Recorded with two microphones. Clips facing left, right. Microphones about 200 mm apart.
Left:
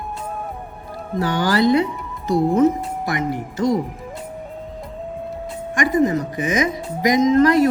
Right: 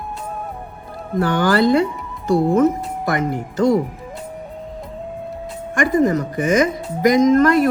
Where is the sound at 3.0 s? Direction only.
50° right (ahead or behind).